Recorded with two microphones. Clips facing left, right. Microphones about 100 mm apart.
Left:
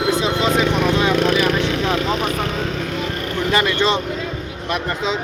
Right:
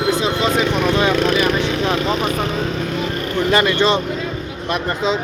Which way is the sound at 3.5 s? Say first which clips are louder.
Right 2 dB; 55° right (ahead or behind).